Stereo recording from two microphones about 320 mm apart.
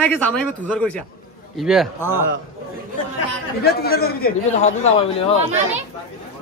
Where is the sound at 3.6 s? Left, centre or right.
Left.